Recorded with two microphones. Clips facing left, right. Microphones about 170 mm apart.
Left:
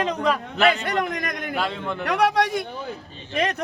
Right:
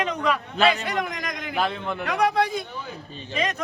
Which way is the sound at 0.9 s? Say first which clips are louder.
Left 3 dB; 55° left (ahead or behind).